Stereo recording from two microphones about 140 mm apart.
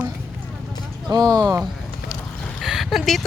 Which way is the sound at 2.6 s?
Centre (ahead or behind).